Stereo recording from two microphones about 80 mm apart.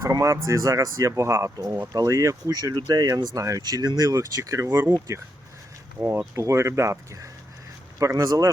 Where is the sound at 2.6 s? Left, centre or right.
Right.